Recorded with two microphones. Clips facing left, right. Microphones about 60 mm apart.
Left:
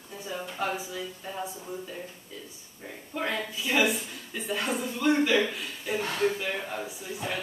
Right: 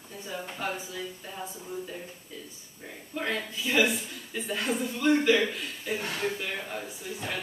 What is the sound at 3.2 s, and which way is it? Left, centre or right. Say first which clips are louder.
A woman's voice: left 1 dB; centre.